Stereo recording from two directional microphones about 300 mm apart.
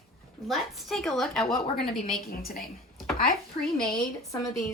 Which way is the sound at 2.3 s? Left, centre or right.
Left.